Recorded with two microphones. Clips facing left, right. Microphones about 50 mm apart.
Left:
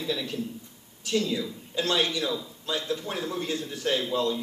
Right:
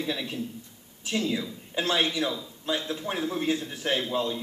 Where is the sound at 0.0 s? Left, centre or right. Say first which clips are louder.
Left 1 dB; right.